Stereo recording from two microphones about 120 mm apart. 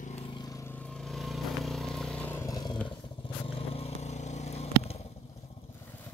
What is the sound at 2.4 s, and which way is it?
Vehicle, 35° left (ahead or behind).